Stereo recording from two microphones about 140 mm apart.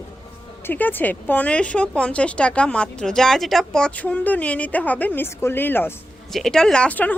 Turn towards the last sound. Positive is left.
turn(degrees=10)  # may be behind; listen again after turning